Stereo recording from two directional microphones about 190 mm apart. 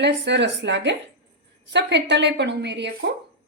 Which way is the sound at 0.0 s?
65° right (ahead or behind).